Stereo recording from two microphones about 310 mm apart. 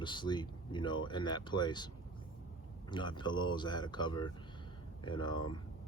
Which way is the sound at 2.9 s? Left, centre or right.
Centre.